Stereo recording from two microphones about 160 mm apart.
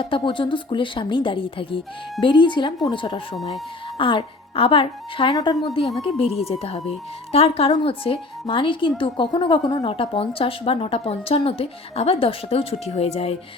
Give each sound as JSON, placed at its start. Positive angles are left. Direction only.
{"t": 0.0, "sound": "a woman's voice", "side_deg": 30}